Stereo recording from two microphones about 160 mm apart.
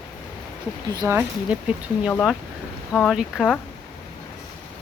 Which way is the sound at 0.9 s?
15° right (ahead or behind).